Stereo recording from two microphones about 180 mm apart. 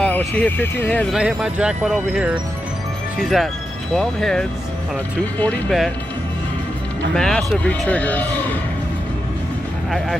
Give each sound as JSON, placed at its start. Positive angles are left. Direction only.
{"t": 0.4, "sound": "speech", "side_deg": 10}
{"t": 1.1, "sound": "speech", "side_deg": -5}
{"t": 7.2, "sound": "speech", "side_deg": 5}
{"t": 9.8, "sound": "speech", "side_deg": 0}